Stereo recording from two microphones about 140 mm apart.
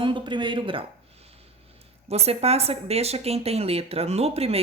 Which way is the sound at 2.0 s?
45° right (ahead or behind).